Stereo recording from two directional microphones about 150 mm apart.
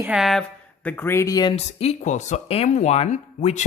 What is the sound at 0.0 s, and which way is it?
Speech, 5° right (ahead or behind).